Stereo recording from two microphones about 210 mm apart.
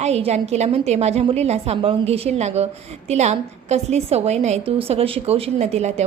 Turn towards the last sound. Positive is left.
turn(degrees=-30)  # may be behind; listen again after turning